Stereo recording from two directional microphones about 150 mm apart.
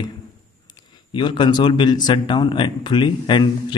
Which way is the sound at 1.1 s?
30° left (ahead or behind).